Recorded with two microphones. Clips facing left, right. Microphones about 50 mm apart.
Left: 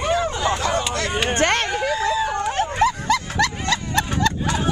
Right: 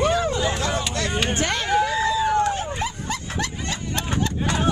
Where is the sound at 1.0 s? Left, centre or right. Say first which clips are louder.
Left 2 dB; centre.